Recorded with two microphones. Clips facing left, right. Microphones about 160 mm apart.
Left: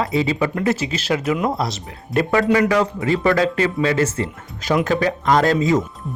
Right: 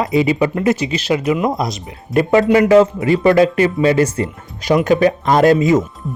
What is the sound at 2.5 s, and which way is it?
A man's voice, 25° right (ahead or behind).